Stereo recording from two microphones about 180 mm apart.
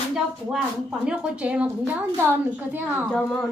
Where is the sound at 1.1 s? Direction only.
5° right (ahead or behind).